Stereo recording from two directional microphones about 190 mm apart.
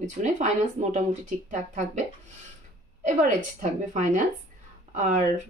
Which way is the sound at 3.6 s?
45° right (ahead or behind).